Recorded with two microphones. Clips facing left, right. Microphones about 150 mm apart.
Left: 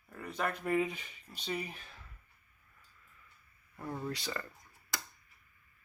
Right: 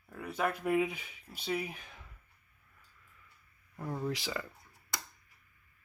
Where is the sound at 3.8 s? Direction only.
10° right (ahead or behind).